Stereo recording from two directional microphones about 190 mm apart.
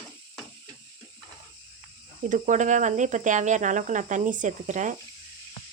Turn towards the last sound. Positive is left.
turn(degrees=-40)  # may be behind; listen again after turning